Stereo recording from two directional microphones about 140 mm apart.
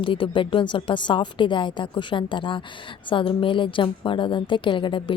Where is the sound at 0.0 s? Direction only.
35° left (ahead or behind).